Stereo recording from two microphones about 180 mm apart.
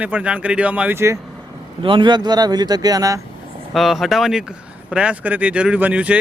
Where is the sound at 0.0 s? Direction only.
5° right (ahead or behind).